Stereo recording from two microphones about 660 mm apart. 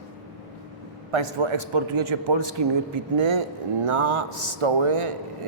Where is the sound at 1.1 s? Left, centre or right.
Right.